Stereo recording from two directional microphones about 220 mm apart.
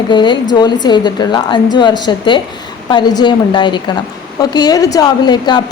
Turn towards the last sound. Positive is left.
turn(degrees=20)  # may be behind; listen again after turning